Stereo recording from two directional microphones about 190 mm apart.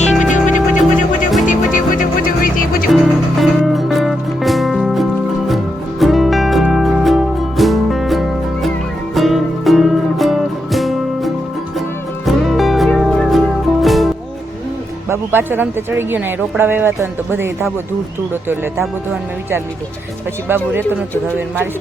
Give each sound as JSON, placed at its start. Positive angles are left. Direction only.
{"t": 0.0, "sound": "music", "side_deg": 40}
{"t": 2.9, "sound": "music", "side_deg": 0}
{"t": 15.1, "sound": "a woman's voice", "side_deg": -10}
{"t": 20.5, "sound": "a woman's voice", "side_deg": -10}